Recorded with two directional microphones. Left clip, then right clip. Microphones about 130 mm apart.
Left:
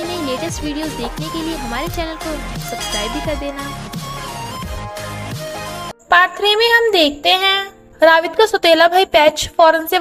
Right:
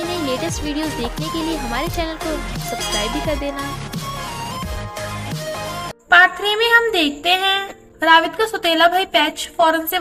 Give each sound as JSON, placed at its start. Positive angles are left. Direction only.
{"t": 0.0, "sound": "speech", "side_deg": 0}
{"t": 2.6, "sound": "music", "side_deg": 0}
{"t": 6.1, "sound": "speech", "side_deg": 45}